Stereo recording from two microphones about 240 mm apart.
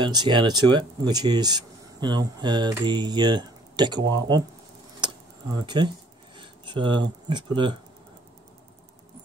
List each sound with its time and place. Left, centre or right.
0.0 s speech: centre
5.0 s a sound: centre
7.2 s speech: centre